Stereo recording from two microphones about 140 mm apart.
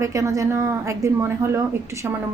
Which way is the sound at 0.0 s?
20° right (ahead or behind).